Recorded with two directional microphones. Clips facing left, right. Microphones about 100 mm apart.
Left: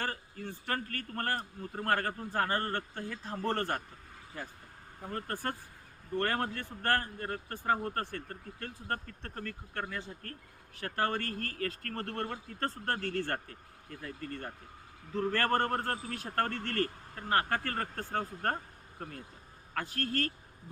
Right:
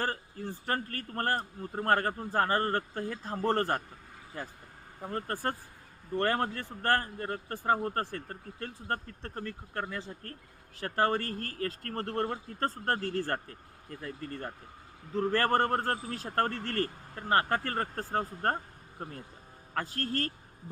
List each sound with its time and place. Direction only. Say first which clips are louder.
0.0 s a man's voice: right 4 dB; 35° right (ahead or behind)
5.0 s a man's voice: right 3 dB; 30° right (ahead or behind)